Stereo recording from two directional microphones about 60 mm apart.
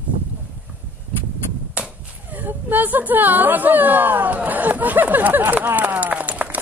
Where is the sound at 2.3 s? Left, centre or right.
Right.